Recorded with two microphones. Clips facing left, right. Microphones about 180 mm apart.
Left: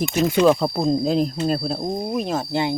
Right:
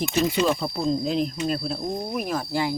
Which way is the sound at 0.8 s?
40° left (ahead or behind).